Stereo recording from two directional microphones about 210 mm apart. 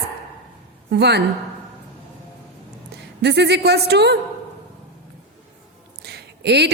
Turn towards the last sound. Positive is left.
turn(degrees=-50)  # may be behind; listen again after turning